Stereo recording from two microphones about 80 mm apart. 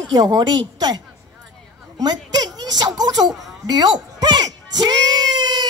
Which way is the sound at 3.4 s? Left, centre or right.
Right.